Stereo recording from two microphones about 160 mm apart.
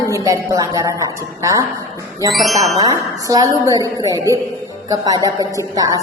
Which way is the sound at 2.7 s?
20° right (ahead or behind).